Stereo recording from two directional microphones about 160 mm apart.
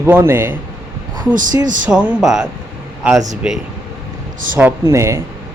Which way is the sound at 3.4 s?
5° right (ahead or behind).